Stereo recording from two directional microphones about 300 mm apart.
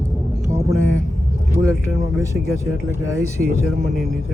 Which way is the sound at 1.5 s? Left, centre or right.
Centre.